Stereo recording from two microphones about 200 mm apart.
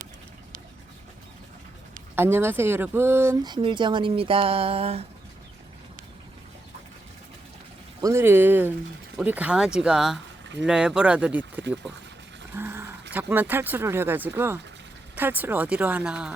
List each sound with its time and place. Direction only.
2.1 s speech: 10° right (ahead or behind); by 5.0 s 30° right (ahead or behind)
8.0 s speech: 15° right (ahead or behind)
12.5 s sheep: 10° right (ahead or behind)
13.1 s speech: 10° right (ahead or behind)